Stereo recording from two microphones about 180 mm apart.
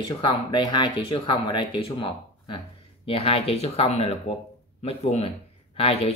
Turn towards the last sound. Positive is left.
turn(degrees=35)  # may be behind; listen again after turning